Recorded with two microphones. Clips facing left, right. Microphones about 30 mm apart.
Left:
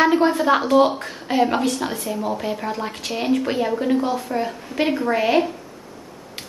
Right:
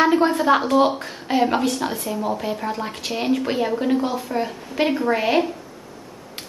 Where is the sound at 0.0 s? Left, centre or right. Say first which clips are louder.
Even; centre.